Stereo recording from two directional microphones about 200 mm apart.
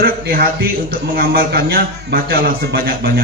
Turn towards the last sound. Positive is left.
turn(degrees=-50)  # may be behind; listen again after turning